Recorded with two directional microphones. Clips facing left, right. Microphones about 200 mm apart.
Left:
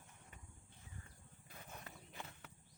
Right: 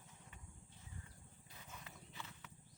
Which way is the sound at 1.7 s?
55° left (ahead or behind).